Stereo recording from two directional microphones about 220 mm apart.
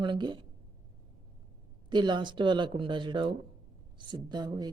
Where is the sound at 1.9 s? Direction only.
20° right (ahead or behind).